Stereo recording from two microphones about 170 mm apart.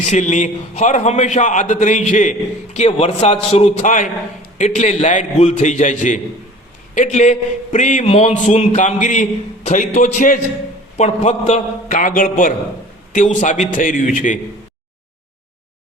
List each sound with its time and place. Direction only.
0.0 s a man's voice: 45° left (ahead or behind)